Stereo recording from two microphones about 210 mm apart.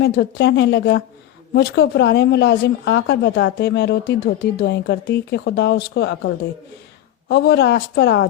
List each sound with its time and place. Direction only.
0.0 s a woman's voice: 55° left (ahead or behind)